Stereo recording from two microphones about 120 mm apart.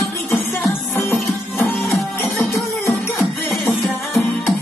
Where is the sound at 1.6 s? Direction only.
20° left (ahead or behind).